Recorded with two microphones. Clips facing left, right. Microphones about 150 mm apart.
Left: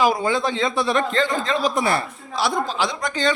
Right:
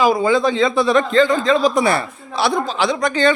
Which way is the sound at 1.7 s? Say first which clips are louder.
Right 4 dB; 85° right.